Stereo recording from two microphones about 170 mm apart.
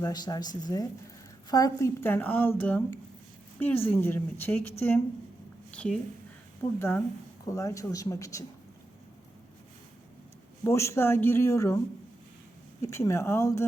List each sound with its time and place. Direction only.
0.0 s a woman's voice: 25° left (ahead or behind)
10.6 s speech: 15° left (ahead or behind)
12.8 s speech: 15° left (ahead or behind)